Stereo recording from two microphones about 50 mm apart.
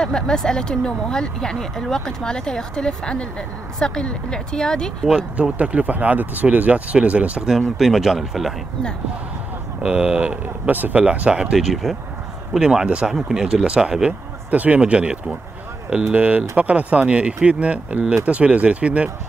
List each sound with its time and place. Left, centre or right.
0.0 s speech: centre
5.1 s speech: right
7.7 s speech: centre
9.8 s speech: right
11.5 s speech: centre
12.5 s speech: centre
14.5 s speech: right